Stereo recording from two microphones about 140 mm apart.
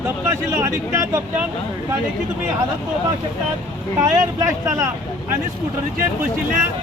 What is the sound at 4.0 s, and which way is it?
Speech, 25° right (ahead or behind).